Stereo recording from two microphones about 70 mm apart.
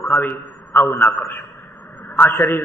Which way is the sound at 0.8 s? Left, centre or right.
Left.